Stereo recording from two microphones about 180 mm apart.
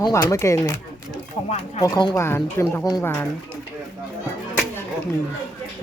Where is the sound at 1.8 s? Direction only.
20° left (ahead or behind).